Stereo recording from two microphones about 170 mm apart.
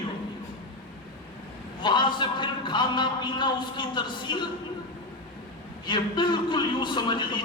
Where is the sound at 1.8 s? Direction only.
25° left (ahead or behind).